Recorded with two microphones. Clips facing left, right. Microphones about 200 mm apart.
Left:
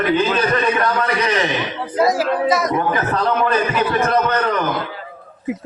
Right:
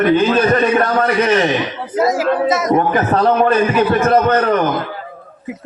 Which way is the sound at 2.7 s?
45° right (ahead or behind).